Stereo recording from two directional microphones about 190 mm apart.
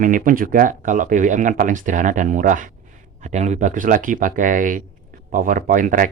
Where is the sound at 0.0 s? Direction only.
45° right (ahead or behind).